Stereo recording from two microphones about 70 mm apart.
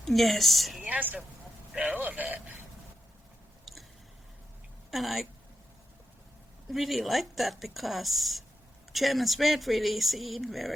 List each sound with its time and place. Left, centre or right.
0.0 s speech: centre
0.9 s speech: right
3.7 s biting: centre
4.9 s speech: centre
6.7 s speech: centre